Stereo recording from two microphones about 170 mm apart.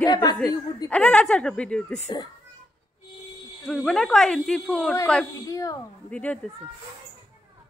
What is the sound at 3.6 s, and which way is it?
A woman's voice, centre (ahead or behind).